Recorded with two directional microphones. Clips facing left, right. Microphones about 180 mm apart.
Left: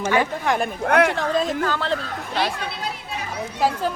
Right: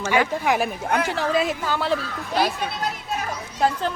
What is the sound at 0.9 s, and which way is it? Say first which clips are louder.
Speech: left 8 dB; 65° left (ahead or behind).